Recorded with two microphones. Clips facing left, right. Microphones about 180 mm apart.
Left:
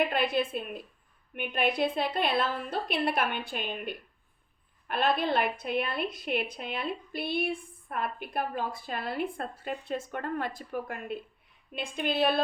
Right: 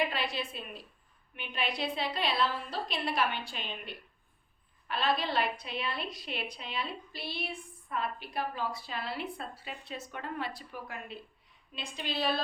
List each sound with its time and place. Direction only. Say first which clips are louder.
0.0 s a woman's voice: left 6 dB; 55° left (ahead or behind)